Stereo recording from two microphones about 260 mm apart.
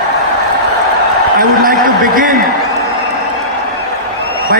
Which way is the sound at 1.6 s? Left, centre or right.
Right.